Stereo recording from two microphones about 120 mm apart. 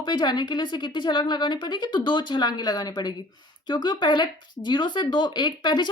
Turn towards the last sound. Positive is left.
turn(degrees=40)  # may be behind; listen again after turning